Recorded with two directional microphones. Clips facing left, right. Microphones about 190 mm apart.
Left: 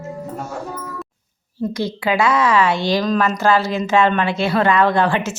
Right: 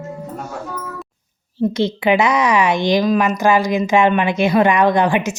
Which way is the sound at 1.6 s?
25° right (ahead or behind).